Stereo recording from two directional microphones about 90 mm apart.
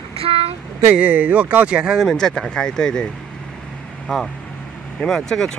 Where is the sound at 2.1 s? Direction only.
5° left (ahead or behind).